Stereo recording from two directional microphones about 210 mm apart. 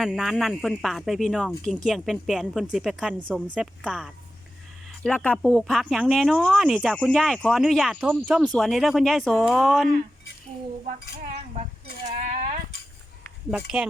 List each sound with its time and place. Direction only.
0.0 s speech: centre (ahead or behind)
10.8 s speech: 40° right (ahead or behind)